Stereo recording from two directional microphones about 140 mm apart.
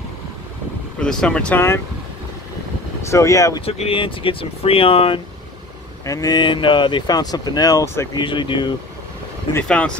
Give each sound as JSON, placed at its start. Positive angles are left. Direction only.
{"t": 0.9, "sound": "speech", "side_deg": 5}
{"t": 3.0, "sound": "speech", "side_deg": 20}
{"t": 3.6, "sound": "speech", "side_deg": 45}
{"t": 6.0, "sound": "speech", "side_deg": 25}
{"t": 8.2, "sound": "speech", "side_deg": 35}
{"t": 9.5, "sound": "speech", "side_deg": 10}